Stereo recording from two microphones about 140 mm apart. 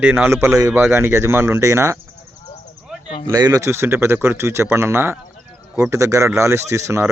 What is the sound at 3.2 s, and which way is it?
Speech, 25° right (ahead or behind).